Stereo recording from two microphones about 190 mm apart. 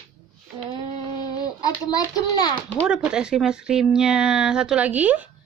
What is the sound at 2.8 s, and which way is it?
Speech, 5° right (ahead or behind).